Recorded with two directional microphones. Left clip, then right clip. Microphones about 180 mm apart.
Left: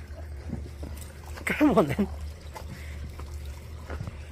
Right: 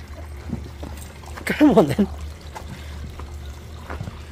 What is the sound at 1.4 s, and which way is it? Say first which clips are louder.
Speech: right 7 dB; 15° right (ahead or behind).